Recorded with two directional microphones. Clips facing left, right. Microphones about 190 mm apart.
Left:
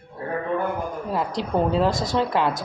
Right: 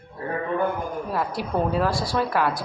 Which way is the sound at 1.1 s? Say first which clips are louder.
Left 3 dB; 20° left (ahead or behind).